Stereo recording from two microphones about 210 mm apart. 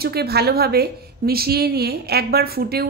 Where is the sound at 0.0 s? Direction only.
50° right (ahead or behind).